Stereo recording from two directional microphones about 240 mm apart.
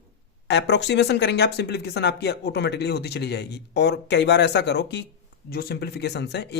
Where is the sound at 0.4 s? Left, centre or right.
Left.